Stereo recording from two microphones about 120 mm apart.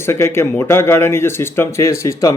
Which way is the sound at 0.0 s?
20° left (ahead or behind).